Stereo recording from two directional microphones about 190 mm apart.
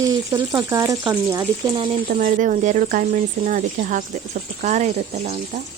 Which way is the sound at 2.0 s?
45° right (ahead or behind).